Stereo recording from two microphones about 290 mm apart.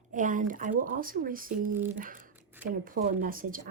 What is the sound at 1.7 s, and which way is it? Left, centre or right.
Speech, centre.